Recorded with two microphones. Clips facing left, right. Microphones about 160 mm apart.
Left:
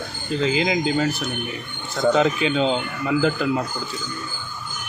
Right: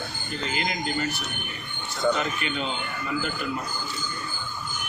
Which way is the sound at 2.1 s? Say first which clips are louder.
Left 9 dB; 90° left.